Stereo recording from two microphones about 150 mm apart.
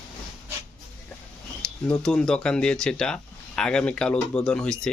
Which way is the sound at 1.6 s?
5° left (ahead or behind).